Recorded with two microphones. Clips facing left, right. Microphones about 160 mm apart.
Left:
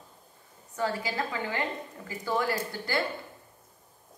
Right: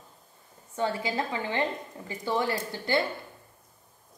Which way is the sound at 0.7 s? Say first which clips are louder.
Right 2 dB; 25° right (ahead or behind).